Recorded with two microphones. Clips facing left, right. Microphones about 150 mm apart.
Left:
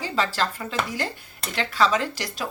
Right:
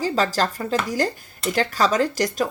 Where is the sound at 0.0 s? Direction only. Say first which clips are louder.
Right 4 dB; 40° right (ahead or behind).